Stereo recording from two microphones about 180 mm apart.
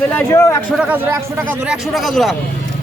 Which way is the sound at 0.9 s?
10° right (ahead or behind).